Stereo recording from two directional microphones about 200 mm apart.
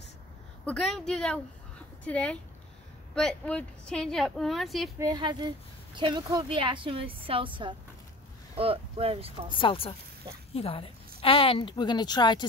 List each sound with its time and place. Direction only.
0.7 s speech: centre (ahead or behind)
4.9 s a woman's voice: 20° right (ahead or behind)
9.5 s a woman's voice: 25° left (ahead or behind)